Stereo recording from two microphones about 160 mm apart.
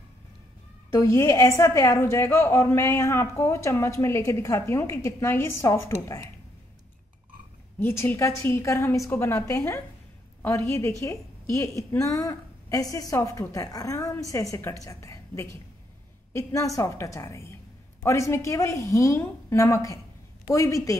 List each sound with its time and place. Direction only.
0.9 s a woman's voice: 20° left (ahead or behind)
7.8 s a woman's voice: 15° left (ahead or behind)